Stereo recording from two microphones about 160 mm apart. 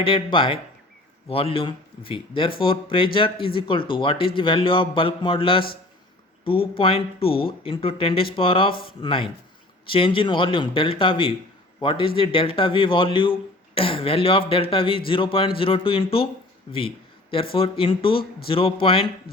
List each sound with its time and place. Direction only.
0.0 s speech: 35° left (ahead or behind)
17.5 s speech: 35° left (ahead or behind)